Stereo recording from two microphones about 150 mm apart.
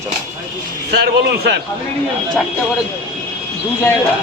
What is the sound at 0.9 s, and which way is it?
Speech, 90° right.